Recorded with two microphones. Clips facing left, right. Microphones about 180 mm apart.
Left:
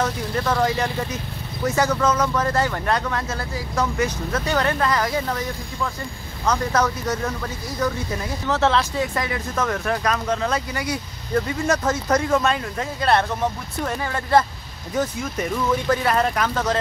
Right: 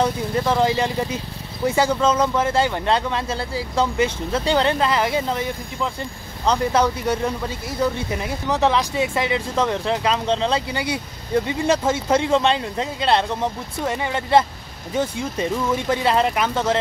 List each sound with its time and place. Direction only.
0.4 s speech: 20° right (ahead or behind)
8.1 s speech: 15° right (ahead or behind)
15.9 s speech: 25° right (ahead or behind)